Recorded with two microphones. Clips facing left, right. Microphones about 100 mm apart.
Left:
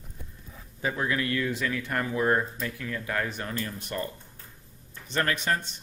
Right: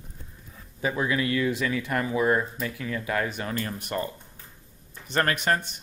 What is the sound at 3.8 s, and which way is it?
Speech, 65° right (ahead or behind).